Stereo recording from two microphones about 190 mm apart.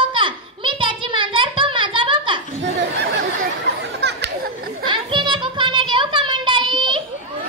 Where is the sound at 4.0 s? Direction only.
65° right (ahead or behind).